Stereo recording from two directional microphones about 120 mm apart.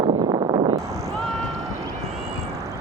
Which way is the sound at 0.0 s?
45° right (ahead or behind).